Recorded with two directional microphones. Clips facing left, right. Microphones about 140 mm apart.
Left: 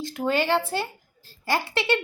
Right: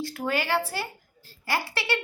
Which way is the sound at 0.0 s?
20° left (ahead or behind).